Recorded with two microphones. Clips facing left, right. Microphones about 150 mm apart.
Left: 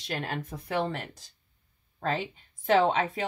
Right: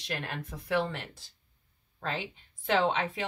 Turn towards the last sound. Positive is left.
turn(degrees=40)  # may be behind; listen again after turning